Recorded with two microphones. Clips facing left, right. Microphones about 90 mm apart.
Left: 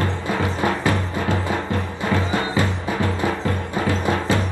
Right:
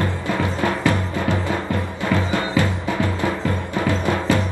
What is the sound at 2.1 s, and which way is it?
Music, 25° left (ahead or behind).